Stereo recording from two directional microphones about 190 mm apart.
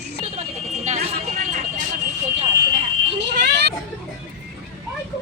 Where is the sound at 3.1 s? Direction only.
65° right (ahead or behind).